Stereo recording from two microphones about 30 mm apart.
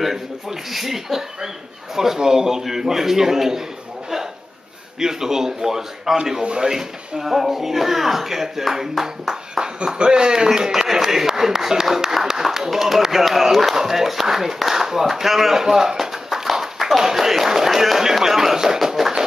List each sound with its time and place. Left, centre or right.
0.7 s speech: centre
5.0 s speech: centre
6.4 s speech: right
6.7 s speech: centre
9.8 s a man's voice: right; by 18.8 s centre
18.9 s tap: centre